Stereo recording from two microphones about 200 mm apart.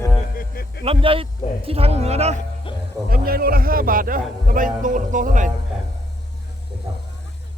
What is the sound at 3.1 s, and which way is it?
A man's voice, 50° right (ahead or behind).